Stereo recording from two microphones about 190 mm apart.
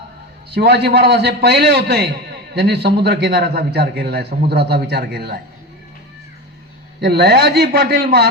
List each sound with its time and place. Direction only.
0.5 s a man's voice: 60° right (ahead or behind)
7.0 s a man's voice: 60° right (ahead or behind)